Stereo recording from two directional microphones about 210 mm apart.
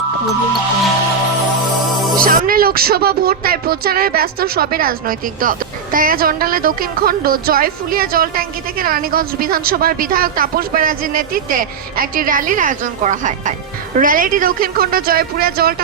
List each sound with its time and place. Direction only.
2.1 s speech: 45° right (ahead or behind)